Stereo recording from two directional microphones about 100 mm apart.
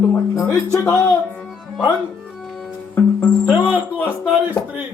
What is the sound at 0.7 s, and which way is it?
Speech, 35° left (ahead or behind).